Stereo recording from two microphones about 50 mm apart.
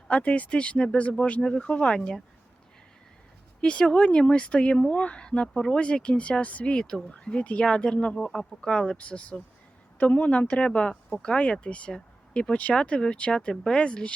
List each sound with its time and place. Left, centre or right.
0.1 s speech: left
3.6 s speech: centre